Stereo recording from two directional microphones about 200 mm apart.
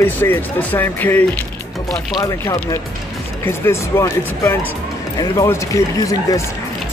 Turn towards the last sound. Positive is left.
turn(degrees=15)  # may be behind; listen again after turning